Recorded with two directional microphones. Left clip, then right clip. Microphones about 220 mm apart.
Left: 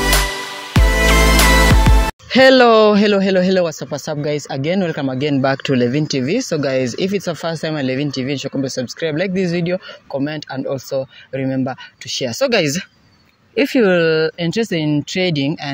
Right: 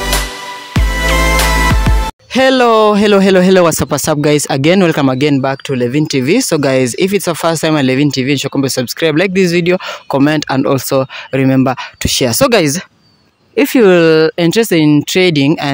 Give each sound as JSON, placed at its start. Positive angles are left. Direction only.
{"t": 0.7, "sound": "music", "side_deg": 0}
{"t": 2.3, "sound": "speech", "side_deg": -15}
{"t": 3.1, "sound": "speech", "side_deg": -40}
{"t": 5.4, "sound": "speech", "side_deg": -20}